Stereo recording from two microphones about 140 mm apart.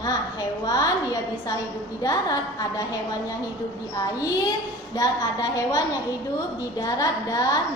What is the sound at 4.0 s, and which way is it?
A woman's voice, 25° left (ahead or behind).